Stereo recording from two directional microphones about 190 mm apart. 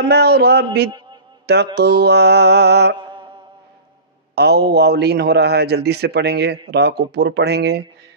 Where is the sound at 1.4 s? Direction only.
60° right (ahead or behind).